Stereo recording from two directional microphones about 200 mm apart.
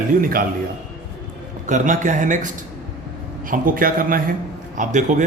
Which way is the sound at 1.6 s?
40° right (ahead or behind).